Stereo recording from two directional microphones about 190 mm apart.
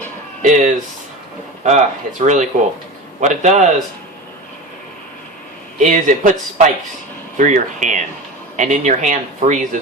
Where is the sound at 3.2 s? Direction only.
40° right (ahead or behind).